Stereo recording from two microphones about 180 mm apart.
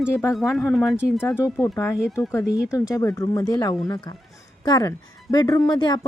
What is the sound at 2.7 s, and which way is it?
A woman's voice, 20° left (ahead or behind).